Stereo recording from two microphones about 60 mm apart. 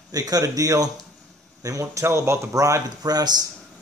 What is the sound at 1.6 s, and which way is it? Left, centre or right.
Speech, right.